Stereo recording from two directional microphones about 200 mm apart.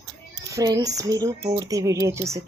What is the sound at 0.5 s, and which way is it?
Speech, 20° right (ahead or behind).